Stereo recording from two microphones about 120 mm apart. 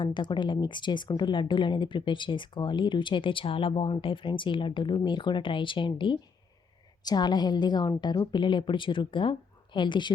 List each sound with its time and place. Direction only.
0.0 s speech: 40° left (ahead or behind)